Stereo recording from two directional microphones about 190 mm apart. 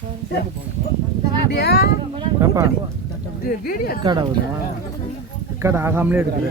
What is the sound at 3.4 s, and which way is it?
Speech, 50° left (ahead or behind).